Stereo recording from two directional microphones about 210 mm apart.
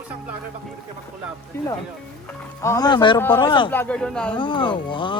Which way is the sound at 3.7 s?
5° left (ahead or behind).